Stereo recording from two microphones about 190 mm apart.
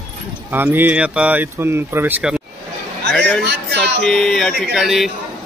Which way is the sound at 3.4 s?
60° right (ahead or behind).